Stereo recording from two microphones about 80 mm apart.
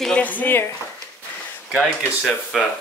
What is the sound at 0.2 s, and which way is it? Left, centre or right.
Speech, left.